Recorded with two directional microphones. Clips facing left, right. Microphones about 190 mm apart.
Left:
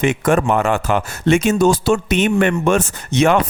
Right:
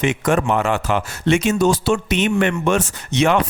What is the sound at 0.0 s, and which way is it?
Speech, 50° left (ahead or behind).